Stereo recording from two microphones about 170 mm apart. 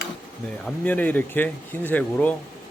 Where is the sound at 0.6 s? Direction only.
10° left (ahead or behind).